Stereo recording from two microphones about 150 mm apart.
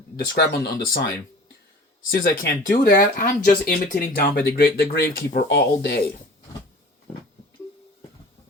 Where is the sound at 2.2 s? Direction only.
80° left.